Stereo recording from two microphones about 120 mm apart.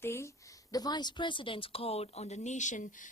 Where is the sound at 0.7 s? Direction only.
35° left (ahead or behind).